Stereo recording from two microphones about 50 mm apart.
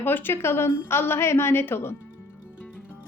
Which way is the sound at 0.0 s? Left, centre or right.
Left.